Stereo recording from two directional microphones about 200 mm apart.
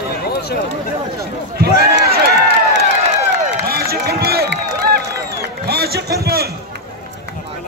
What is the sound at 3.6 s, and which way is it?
Run, 50° right (ahead or behind).